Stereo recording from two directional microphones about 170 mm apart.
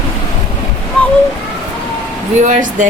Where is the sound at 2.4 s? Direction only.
50° right (ahead or behind).